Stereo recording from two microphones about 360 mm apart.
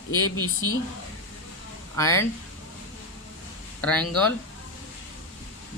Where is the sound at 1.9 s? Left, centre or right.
Centre.